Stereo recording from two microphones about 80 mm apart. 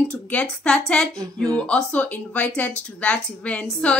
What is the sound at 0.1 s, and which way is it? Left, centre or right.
A woman's voice, centre.